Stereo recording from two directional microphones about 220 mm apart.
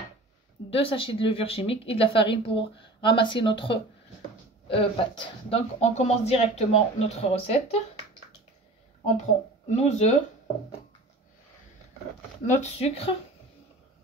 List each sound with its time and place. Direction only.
0.7 s speech: 25° left (ahead or behind)
9.7 s speech: 30° left (ahead or behind)
12.5 s speech: 25° left (ahead or behind)